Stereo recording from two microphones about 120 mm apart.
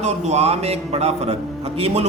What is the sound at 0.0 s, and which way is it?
A man's voice, 70° right (ahead or behind).